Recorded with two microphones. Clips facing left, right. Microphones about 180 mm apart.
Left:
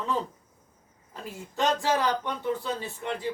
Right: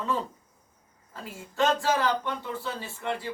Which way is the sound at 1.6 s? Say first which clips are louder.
Right 1 dB; 15° left (ahead or behind).